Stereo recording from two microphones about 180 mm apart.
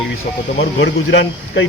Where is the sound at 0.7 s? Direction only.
80° left.